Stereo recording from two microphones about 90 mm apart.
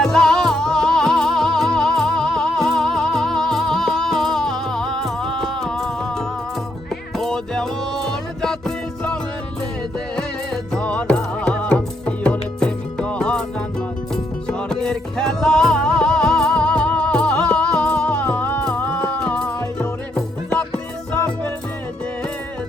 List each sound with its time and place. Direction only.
0.0 s music: 5° left (ahead or behind)
10.2 s music: 10° left (ahead or behind)
14.4 s music: 10° left (ahead or behind)